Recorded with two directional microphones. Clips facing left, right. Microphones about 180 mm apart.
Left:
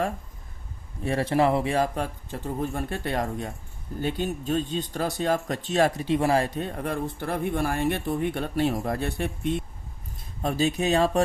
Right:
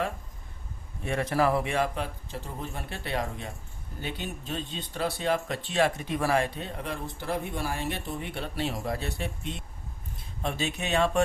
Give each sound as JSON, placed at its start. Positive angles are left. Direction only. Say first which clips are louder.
{"t": 1.0, "sound": "speech", "louder": "left 3 dB", "side_deg": 30}
{"t": 10.4, "sound": "speech", "louder": "left 7 dB", "side_deg": 40}